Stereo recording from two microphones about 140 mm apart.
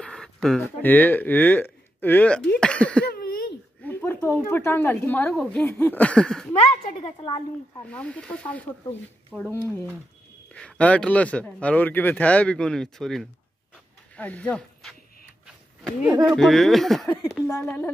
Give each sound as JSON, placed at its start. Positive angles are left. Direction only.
{"t": 0.0, "sound": "a sound", "side_deg": 5}
{"t": 0.7, "sound": "a man's voice", "side_deg": 15}
{"t": 3.2, "sound": "a sound", "side_deg": 90}
{"t": 3.8, "sound": "a woman's voice", "side_deg": 15}
{"t": 6.5, "sound": "a woman's voice", "side_deg": 45}
{"t": 7.9, "sound": "a man's voice", "side_deg": 10}
{"t": 16.1, "sound": "speech", "side_deg": -20}
{"t": 16.3, "sound": "speech", "side_deg": 0}
{"t": 17.3, "sound": "a man's voice", "side_deg": 20}